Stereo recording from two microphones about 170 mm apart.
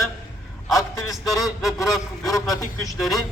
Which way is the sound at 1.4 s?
Centre (ahead or behind).